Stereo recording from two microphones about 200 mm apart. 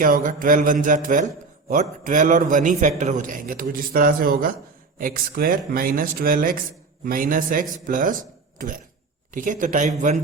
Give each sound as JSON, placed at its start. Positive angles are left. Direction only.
{"t": 0.0, "sound": "a man's voice", "side_deg": -45}